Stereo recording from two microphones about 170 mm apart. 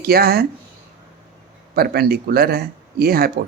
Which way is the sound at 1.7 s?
65° right (ahead or behind).